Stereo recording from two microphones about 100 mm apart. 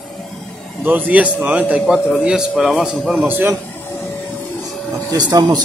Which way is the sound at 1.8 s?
Centre (ahead or behind).